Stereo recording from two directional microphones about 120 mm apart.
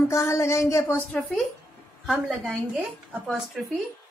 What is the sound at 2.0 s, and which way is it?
A woman's voice, 5° right (ahead or behind).